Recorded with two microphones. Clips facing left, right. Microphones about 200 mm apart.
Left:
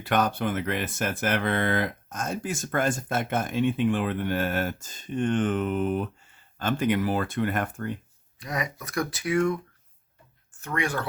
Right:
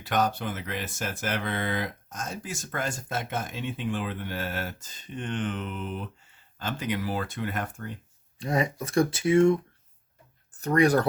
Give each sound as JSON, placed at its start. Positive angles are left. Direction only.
{"t": 0.0, "sound": "speech", "side_deg": 60}
{"t": 8.4, "sound": "speech", "side_deg": -30}
{"t": 10.6, "sound": "speech", "side_deg": -40}